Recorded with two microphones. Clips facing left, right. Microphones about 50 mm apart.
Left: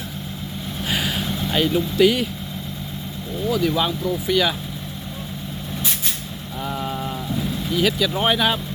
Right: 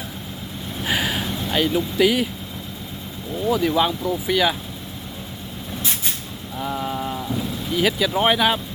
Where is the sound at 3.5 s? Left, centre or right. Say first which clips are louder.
Right 2 dB; centre.